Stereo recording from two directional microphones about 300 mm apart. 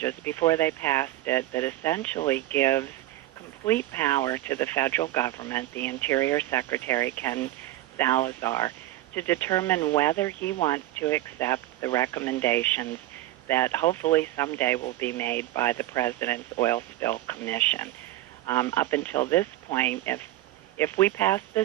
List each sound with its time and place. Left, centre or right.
0.0 s speech: centre